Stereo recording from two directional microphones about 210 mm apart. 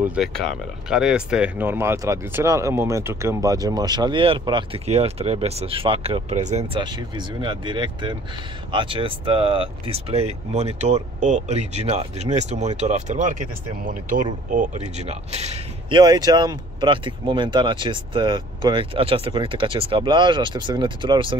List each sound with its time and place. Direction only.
0.1 s speech: centre (ahead or behind); by 16.0 s 30° right (ahead or behind)
16.0 s speech: 20° right (ahead or behind)